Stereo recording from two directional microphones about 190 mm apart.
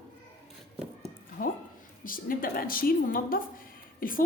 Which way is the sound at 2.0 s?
50° left (ahead or behind).